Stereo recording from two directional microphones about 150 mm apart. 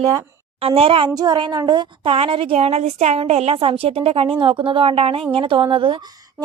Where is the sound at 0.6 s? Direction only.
40° right (ahead or behind).